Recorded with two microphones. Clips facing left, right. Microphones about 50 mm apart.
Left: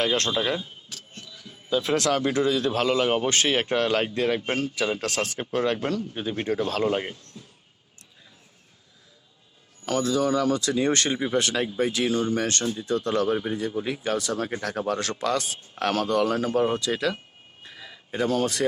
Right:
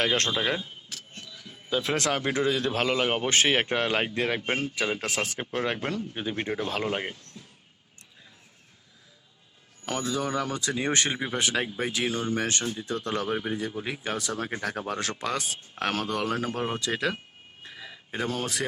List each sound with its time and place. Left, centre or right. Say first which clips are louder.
0.0 s speech: left 1 dB; right
0.3 s a man's voice: left 2 dB; right
1.1 s a man's voice: even; right; by 7.2 s centre
9.8 s a man's voice: left 6 dB; centre
17.6 s a sound: even; centre